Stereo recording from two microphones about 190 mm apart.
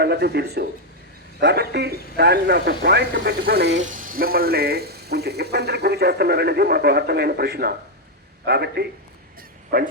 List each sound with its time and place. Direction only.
0.0 s speech: 60° right (ahead or behind)
3.8 s speech: 45° right (ahead or behind)